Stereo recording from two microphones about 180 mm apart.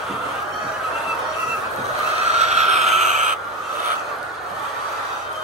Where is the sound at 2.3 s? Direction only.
40° right (ahead or behind).